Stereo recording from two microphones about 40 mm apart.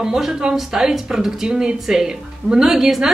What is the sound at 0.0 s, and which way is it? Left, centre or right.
A woman's voice, centre.